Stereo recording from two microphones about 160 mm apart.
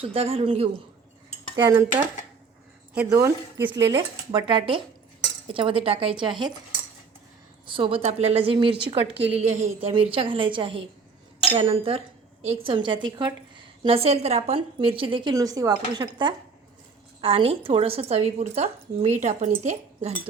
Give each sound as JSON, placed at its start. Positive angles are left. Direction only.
{"t": 0.0, "sound": "speech", "side_deg": -35}
{"t": 3.1, "sound": "a woman's voice", "side_deg": -15}
{"t": 7.7, "sound": "speech", "side_deg": -35}
{"t": 9.9, "sound": "speech", "side_deg": -35}